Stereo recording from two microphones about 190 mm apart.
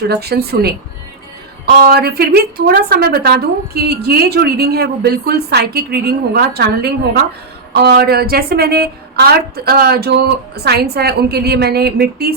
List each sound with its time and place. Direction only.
0.1 s a woman's voice: 55° right (ahead or behind)